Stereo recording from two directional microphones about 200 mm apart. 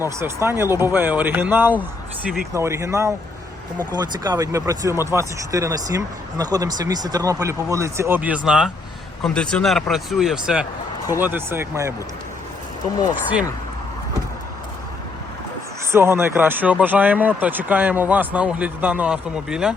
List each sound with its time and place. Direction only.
0.0 s speech: 15° right (ahead or behind)
15.9 s speech: 10° right (ahead or behind)